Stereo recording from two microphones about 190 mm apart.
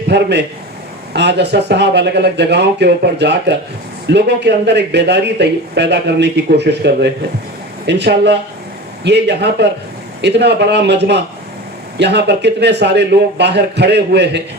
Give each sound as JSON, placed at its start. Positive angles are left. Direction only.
{"t": 0.1, "sound": "speech", "side_deg": -60}